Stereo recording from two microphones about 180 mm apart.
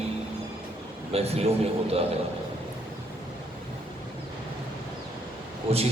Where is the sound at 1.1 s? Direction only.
35° right (ahead or behind).